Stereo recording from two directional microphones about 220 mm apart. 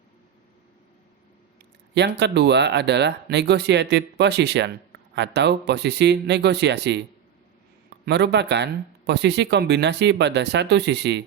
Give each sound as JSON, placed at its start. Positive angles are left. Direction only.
{"t": 2.0, "sound": "speech", "side_deg": -50}